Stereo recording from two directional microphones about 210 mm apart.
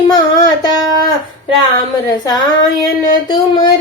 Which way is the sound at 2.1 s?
20° left (ahead or behind).